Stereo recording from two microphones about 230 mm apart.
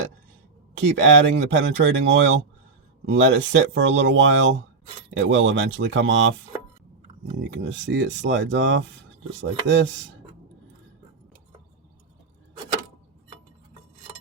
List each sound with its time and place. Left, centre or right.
0.8 s speech: right
7.3 s speech: right